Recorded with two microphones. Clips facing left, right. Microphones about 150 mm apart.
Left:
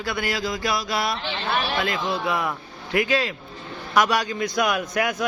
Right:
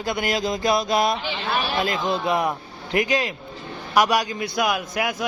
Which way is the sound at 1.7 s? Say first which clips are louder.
Right 2 dB; 25° right (ahead or behind).